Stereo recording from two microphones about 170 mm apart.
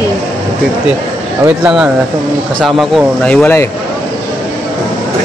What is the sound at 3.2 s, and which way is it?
Speech, 10° left (ahead or behind).